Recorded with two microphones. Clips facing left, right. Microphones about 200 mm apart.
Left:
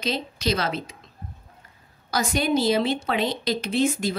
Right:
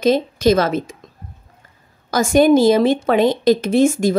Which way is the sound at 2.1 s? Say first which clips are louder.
Right 11 dB; 50° right (ahead or behind).